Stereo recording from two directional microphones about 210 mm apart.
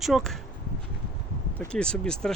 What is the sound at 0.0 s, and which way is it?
Speech, centre (ahead or behind).